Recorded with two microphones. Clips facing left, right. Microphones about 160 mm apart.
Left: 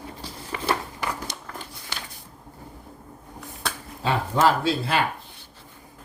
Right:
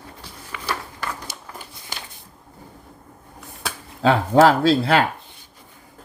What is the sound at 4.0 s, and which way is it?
Speech, 90° right.